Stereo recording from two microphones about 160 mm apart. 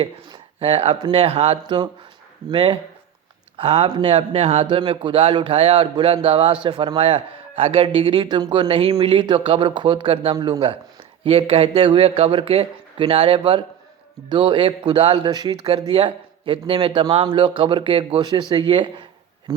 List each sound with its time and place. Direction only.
0.0 s speech: 35° right (ahead or behind)